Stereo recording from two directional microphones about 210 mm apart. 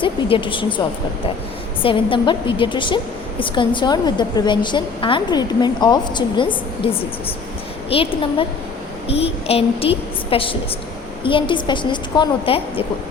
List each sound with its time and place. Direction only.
0.0 s a woman's voice: 25° left (ahead or behind)
1.8 s a woman's voice: 25° left (ahead or behind)